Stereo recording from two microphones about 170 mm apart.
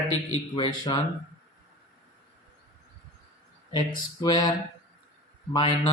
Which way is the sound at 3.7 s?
25° left (ahead or behind).